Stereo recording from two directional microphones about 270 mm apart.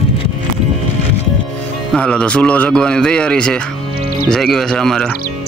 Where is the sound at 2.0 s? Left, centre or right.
Centre.